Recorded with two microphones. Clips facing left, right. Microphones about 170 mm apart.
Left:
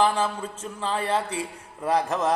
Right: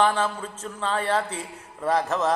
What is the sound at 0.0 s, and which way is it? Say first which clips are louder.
Speech: even; 30° left (ahead or behind).